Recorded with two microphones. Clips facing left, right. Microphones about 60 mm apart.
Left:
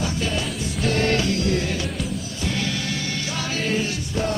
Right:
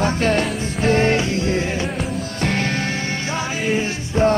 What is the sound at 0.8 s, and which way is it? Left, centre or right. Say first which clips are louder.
Music: right 5 dB; right.